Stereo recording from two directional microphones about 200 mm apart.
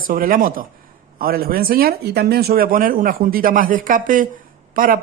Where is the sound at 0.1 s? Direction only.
45° right (ahead or behind).